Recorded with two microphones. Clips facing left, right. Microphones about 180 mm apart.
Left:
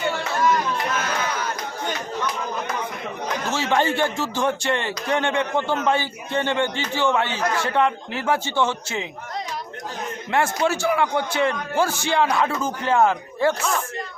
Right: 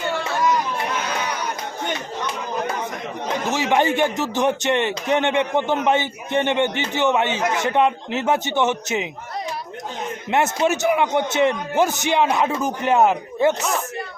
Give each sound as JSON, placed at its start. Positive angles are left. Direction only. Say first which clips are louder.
{"t": 3.4, "sound": "a man's voice", "louder": "right 2 dB", "side_deg": -15}
{"t": 10.2, "sound": "a man's voice", "louder": "right 2 dB", "side_deg": -20}